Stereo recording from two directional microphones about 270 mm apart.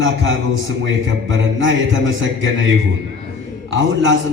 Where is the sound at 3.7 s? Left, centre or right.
Right.